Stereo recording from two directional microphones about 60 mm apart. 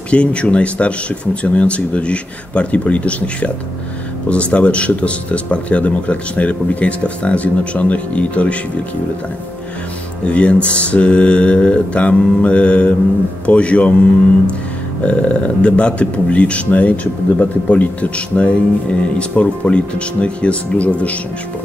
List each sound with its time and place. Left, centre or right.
0.1 s speech: centre
10.2 s speech: centre
15.0 s speech: centre